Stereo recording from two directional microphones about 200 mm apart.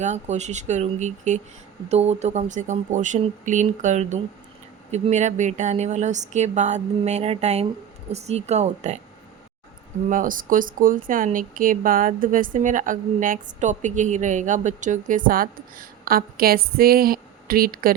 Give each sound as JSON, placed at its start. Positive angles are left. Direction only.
{"t": 0.0, "sound": "a woman's voice", "side_deg": -35}
{"t": 10.1, "sound": "speech", "side_deg": -45}